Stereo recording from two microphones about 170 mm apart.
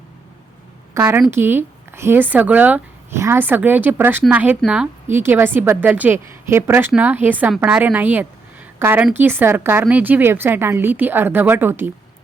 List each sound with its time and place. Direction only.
0.9 s a woman's voice: 10° right (ahead or behind)